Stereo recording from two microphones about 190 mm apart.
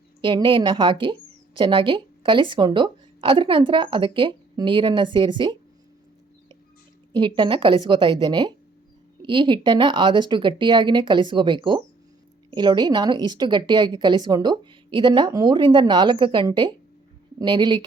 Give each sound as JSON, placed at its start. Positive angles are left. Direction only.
{"t": 0.2, "sound": "a woman's voice", "side_deg": -25}
{"t": 7.1, "sound": "a woman's voice", "side_deg": -25}